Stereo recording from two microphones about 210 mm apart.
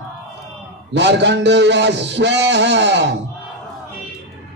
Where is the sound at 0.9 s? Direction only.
55° right (ahead or behind).